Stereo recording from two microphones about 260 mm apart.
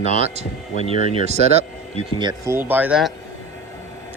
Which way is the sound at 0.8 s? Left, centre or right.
Left.